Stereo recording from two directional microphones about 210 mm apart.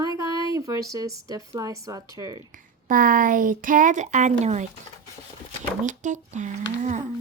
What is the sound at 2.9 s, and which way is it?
Speech, 40° right (ahead or behind).